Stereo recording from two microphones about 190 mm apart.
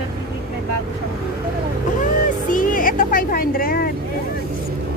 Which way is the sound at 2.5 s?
45° left (ahead or behind).